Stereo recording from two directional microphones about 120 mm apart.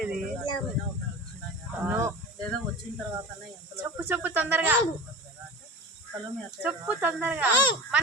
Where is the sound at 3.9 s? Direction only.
15° right (ahead or behind).